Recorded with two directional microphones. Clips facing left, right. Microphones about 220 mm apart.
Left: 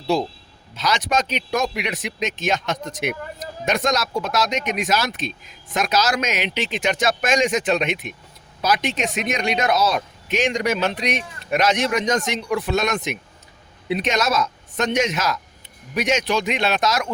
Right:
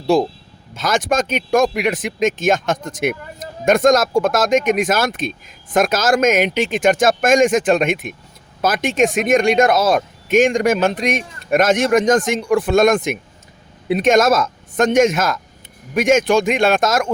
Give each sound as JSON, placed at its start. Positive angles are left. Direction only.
{"t": 0.1, "sound": "speech", "side_deg": -50}